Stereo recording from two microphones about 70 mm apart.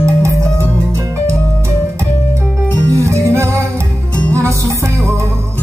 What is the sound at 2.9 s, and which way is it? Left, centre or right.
Music, right.